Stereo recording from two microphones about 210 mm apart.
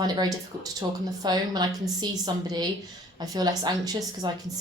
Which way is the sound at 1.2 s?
20° right (ahead or behind).